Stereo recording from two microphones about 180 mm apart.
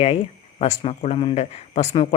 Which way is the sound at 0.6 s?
35° left (ahead or behind).